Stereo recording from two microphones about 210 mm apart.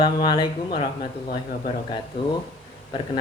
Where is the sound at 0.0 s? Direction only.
20° left (ahead or behind).